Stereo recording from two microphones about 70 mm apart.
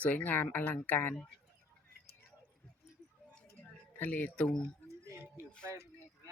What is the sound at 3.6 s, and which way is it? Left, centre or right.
Music, left.